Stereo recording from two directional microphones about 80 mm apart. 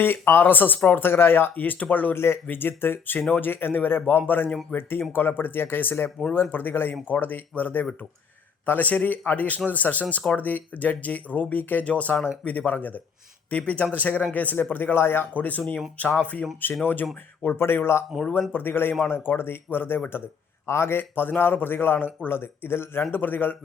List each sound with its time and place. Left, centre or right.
0.0 s speech: left